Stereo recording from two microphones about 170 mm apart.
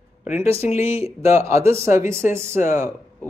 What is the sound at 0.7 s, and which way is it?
Speech, 35° left (ahead or behind).